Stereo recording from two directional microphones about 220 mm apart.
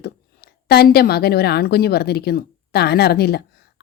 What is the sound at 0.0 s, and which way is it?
A woman's voice, 45° left (ahead or behind).